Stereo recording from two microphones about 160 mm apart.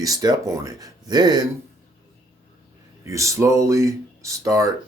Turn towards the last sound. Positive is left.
turn(degrees=-20)  # may be behind; listen again after turning